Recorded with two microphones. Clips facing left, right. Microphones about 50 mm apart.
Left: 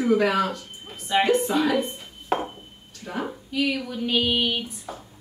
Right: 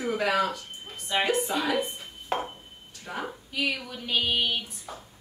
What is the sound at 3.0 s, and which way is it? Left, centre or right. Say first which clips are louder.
A woman's voice: left 4 dB; centre.